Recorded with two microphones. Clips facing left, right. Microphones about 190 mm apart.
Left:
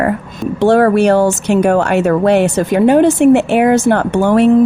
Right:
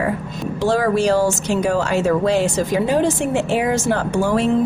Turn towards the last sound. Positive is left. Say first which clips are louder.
# left 7 dB
turn(degrees=60)  # may be behind; listen again after turning